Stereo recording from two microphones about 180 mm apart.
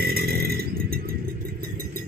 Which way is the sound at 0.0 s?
60° right (ahead or behind).